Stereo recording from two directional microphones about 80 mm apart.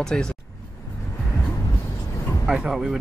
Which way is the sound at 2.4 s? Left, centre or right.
Centre.